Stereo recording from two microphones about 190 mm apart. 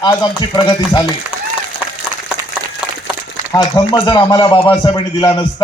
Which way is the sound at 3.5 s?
25° left (ahead or behind).